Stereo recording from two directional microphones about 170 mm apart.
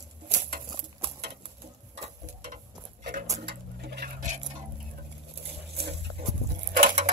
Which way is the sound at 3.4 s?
70° right (ahead or behind).